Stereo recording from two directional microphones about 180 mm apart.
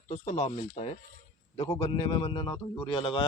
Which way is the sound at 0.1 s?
40° left (ahead or behind).